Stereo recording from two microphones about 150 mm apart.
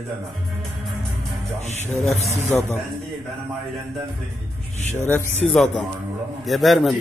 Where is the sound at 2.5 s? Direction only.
5° left (ahead or behind).